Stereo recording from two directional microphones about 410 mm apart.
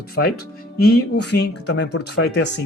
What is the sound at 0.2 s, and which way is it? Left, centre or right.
Speech, left.